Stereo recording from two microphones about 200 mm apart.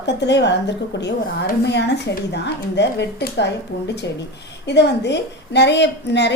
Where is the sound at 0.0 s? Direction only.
60° left (ahead or behind).